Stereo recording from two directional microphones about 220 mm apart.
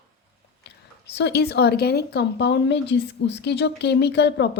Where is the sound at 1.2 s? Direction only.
50° left (ahead or behind).